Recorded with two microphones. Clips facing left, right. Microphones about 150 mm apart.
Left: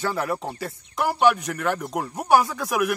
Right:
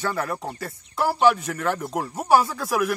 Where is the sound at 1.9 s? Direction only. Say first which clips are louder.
Even; centre (ahead or behind).